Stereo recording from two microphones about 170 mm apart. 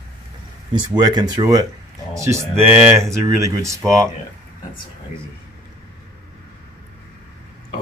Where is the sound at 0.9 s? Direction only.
25° right (ahead or behind).